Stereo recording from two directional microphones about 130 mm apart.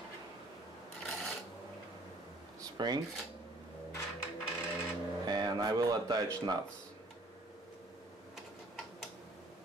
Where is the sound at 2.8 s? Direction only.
30° right (ahead or behind).